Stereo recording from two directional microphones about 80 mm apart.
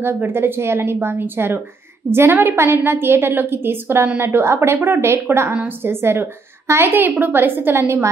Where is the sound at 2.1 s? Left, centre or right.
Right.